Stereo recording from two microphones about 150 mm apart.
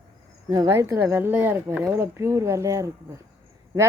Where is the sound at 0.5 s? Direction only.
25° right (ahead or behind).